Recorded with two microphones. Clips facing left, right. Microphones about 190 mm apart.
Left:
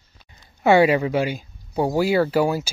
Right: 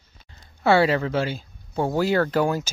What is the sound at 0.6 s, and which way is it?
Speech, 15° left (ahead or behind).